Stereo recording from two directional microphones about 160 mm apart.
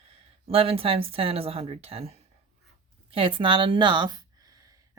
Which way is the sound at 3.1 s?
30° right (ahead or behind).